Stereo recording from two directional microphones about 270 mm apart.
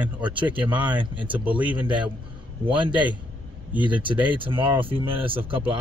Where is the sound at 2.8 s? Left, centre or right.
Centre.